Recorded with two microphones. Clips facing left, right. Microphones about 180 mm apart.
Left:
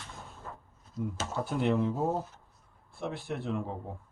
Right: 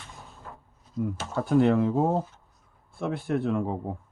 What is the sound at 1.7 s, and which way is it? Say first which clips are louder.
Speech: right 6 dB; 85° right.